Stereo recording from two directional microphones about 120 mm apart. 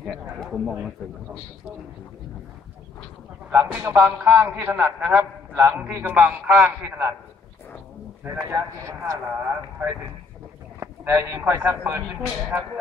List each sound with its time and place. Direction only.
3.6 s a man's voice: 15° right (ahead or behind)
8.2 s a man's voice: 20° right (ahead or behind)
11.1 s a man's voice: 25° right (ahead or behind)